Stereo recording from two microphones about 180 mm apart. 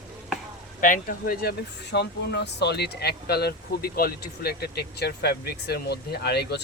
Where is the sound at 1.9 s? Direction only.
70° left (ahead or behind).